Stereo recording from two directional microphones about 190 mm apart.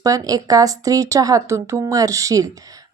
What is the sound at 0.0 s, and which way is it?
A woman's voice, 20° right (ahead or behind).